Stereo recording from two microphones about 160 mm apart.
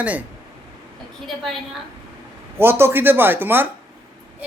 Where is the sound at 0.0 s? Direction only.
10° right (ahead or behind).